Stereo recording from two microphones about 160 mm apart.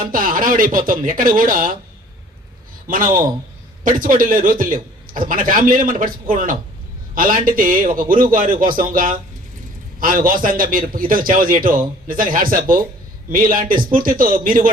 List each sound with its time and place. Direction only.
0.1 s a man's voice: 60° right (ahead or behind)
2.8 s a man's voice: 60° right (ahead or behind)